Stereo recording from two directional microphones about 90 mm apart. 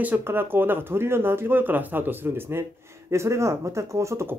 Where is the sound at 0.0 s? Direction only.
20° right (ahead or behind).